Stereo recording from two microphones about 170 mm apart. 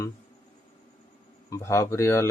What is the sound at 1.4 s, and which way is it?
Speech, 20° left (ahead or behind).